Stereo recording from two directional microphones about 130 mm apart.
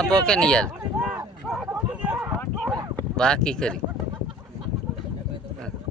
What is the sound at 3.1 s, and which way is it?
Speech, 5° left (ahead or behind).